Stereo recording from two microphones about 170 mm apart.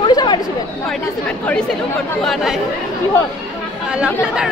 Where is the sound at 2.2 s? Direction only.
Centre (ahead or behind).